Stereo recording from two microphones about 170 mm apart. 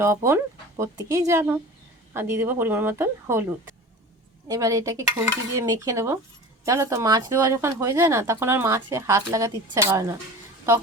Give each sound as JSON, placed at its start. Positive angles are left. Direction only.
{"t": 0.0, "sound": "speech", "side_deg": -15}
{"t": 4.4, "sound": "a woman's voice", "side_deg": -20}